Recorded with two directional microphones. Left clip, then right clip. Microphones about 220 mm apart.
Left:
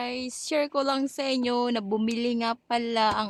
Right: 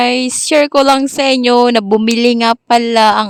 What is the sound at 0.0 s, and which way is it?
Speech, 45° right (ahead or behind).